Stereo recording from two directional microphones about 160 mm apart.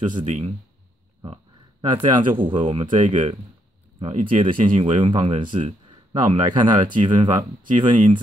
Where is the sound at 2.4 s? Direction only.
30° right (ahead or behind).